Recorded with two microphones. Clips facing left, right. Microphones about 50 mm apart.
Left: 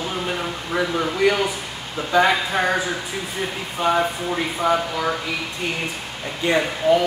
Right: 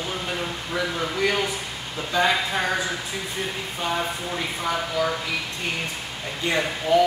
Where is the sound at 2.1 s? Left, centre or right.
Left.